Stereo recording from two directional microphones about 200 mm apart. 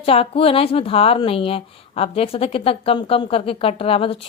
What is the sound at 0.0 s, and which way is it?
Speech, 30° left (ahead or behind).